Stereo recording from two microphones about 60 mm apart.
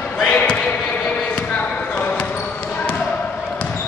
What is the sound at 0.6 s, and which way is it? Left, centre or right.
Basketball bounce, centre.